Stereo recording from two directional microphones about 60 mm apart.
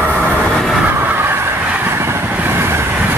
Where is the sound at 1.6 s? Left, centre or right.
Right.